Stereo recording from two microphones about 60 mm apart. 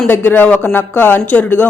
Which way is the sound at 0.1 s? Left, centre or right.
Left.